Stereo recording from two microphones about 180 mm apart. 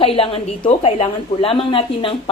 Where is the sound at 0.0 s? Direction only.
30° left (ahead or behind).